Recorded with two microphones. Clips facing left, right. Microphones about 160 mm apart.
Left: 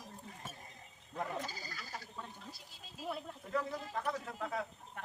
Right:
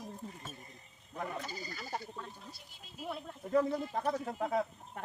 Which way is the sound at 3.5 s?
35° right (ahead or behind).